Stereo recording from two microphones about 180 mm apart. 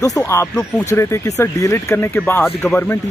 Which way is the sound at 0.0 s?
15° left (ahead or behind).